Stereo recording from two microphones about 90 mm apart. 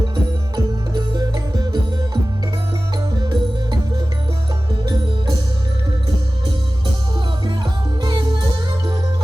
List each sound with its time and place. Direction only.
0.5 s music: 50° right (ahead or behind)
3.1 s music: 50° right (ahead or behind)
7.4 s music: 55° right (ahead or behind)